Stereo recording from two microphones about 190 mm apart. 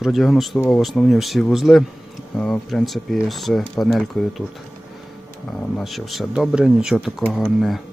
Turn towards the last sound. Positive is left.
turn(degrees=0)  # may be behind; listen again after turning